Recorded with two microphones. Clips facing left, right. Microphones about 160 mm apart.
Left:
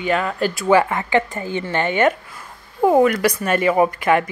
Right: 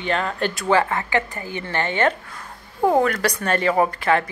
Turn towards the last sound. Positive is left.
turn(degrees=10)  # may be behind; listen again after turning